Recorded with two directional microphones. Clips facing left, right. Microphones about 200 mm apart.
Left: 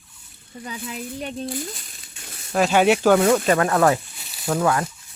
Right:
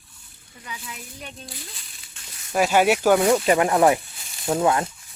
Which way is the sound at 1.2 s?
45° left (ahead or behind).